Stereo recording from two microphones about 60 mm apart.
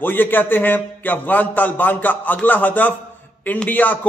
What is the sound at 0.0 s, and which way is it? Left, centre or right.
A man's voice, left.